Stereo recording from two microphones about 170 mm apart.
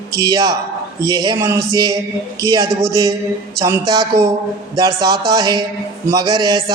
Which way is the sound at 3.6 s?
20° right (ahead or behind).